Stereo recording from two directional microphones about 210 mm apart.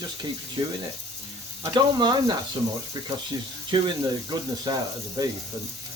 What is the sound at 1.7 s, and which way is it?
Speech, 20° right (ahead or behind).